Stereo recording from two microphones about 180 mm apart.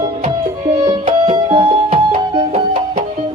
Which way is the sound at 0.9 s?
25° right (ahead or behind).